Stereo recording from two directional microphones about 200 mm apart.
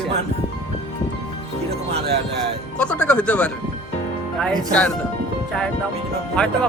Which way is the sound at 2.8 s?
5° left (ahead or behind).